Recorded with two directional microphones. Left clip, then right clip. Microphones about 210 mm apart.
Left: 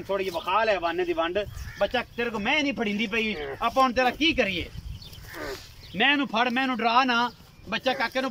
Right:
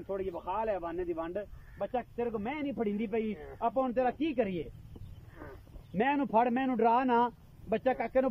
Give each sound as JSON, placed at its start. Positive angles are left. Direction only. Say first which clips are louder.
{"t": 0.1, "sound": "speech", "louder": "left 10 dB", "side_deg": -25}
{"t": 5.9, "sound": "speech", "louder": "left 5 dB", "side_deg": -45}